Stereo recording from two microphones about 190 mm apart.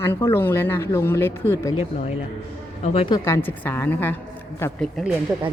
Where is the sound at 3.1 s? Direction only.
10° left (ahead or behind).